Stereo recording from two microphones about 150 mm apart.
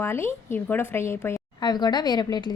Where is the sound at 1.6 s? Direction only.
30° left (ahead or behind).